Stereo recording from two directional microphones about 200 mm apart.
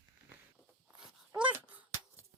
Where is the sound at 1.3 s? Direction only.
5° right (ahead or behind).